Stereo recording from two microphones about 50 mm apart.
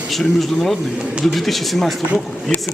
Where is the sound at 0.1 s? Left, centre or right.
Centre.